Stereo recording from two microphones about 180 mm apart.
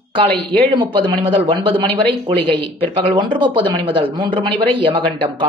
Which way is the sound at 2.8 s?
30° right (ahead or behind).